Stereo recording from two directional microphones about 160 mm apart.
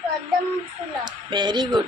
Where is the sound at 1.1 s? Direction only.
30° right (ahead or behind).